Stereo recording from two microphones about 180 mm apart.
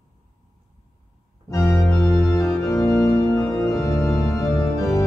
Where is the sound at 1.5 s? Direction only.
15° left (ahead or behind).